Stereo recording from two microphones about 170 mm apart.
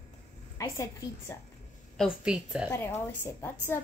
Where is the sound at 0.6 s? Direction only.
20° left (ahead or behind).